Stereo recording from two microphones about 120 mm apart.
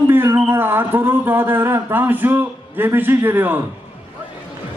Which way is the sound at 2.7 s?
20° right (ahead or behind).